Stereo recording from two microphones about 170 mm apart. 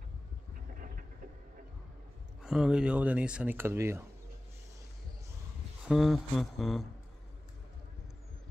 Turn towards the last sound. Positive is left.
turn(degrees=0)  # may be behind; listen again after turning